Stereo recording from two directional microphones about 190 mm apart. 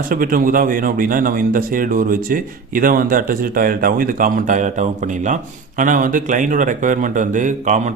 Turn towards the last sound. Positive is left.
turn(degrees=-40)  # may be behind; listen again after turning